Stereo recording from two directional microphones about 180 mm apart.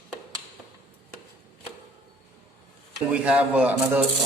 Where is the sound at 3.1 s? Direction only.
5° right (ahead or behind).